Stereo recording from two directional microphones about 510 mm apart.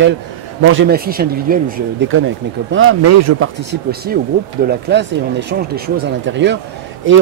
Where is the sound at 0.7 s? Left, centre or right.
Centre.